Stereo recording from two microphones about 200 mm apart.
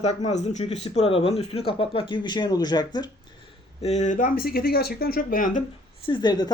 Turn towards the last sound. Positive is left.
turn(degrees=20)  # may be behind; listen again after turning